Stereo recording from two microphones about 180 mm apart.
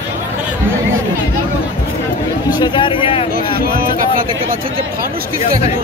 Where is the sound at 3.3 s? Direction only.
55° right (ahead or behind).